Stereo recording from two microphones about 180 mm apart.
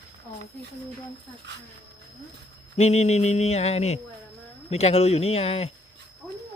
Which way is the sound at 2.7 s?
35° left (ahead or behind).